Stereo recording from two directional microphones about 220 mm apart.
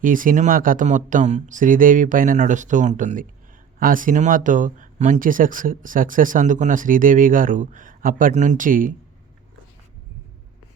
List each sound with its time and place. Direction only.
0.0 s speech: 40° right (ahead or behind)